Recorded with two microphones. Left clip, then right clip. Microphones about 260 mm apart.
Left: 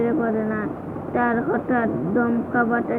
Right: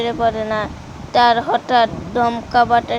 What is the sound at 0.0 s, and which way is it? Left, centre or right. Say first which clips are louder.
Speech: right 4 dB; right.